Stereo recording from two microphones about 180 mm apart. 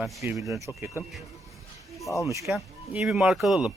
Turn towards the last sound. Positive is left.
turn(degrees=0)  # may be behind; listen again after turning